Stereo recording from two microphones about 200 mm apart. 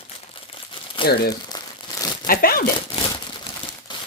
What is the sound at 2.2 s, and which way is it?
Speech, 45° left (ahead or behind).